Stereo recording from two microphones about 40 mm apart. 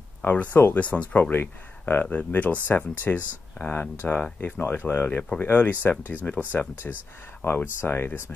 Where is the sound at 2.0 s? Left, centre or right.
Left.